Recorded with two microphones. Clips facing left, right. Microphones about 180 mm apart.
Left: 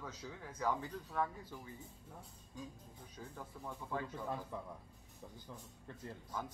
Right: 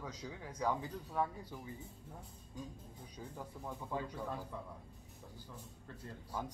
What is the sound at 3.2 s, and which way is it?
Speech, 15° right (ahead or behind).